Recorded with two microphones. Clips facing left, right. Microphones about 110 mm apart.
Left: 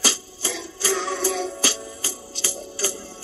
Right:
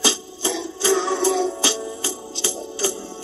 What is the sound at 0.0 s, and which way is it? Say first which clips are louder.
Music: right 5 dB; 20° right (ahead or behind).